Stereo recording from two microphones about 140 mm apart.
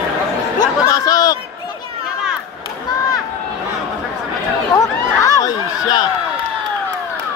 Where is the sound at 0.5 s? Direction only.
25° left (ahead or behind).